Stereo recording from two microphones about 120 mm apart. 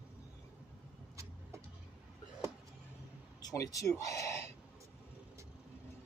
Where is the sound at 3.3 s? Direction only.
30° left (ahead or behind).